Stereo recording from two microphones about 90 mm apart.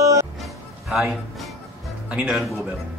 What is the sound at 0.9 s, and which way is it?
Speech, 5° right (ahead or behind).